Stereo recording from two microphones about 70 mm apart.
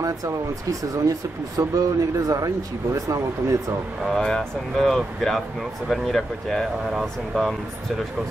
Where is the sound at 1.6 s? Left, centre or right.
Right.